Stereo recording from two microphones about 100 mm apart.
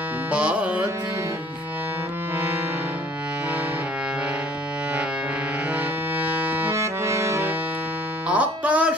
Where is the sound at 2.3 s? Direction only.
20° right (ahead or behind).